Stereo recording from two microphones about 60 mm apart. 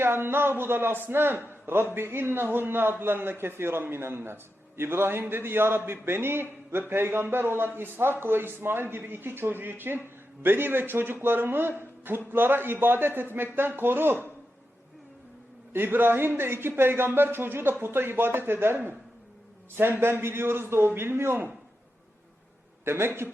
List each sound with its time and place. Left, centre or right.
0.0 s a man's voice: right
15.7 s a man's voice: right
22.8 s a man's voice: right